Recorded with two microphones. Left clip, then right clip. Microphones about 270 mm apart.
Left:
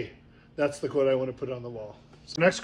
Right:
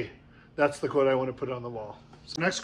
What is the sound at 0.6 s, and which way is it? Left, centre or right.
A man's voice, centre.